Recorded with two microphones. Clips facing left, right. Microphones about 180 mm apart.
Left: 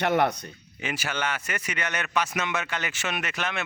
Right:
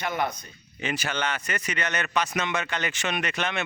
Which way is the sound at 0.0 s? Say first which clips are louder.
Left 5 dB; 70° left (ahead or behind).